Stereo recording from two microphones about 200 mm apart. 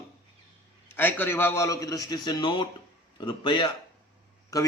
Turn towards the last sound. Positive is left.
turn(degrees=15)  # may be behind; listen again after turning